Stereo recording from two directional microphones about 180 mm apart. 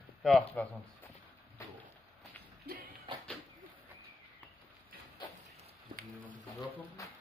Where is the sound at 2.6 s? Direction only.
60° right (ahead or behind).